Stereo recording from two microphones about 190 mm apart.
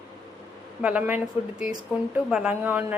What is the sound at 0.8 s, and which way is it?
Speech, 5° right (ahead or behind).